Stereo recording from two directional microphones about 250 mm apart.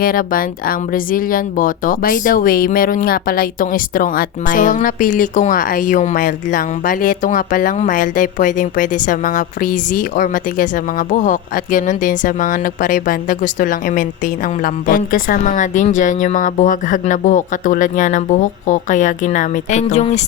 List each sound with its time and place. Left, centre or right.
0.0 s speech: left